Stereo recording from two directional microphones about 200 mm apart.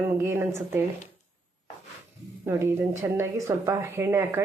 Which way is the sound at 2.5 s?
15° right (ahead or behind).